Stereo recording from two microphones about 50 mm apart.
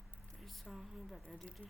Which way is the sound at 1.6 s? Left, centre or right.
Left.